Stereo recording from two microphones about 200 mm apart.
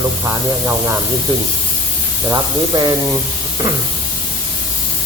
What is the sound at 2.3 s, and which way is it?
Speech, 20° right (ahead or behind).